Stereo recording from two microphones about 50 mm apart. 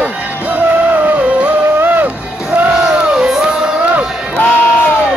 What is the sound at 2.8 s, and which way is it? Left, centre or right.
Music, centre.